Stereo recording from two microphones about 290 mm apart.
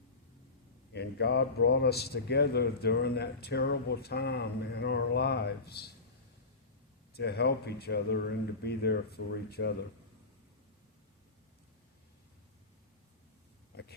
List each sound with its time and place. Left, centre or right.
0.9 s speech: left
7.1 s speech: left
13.7 s a sound: left